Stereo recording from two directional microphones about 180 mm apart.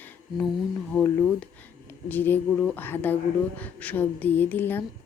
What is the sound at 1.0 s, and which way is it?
Speech, 5° left (ahead or behind).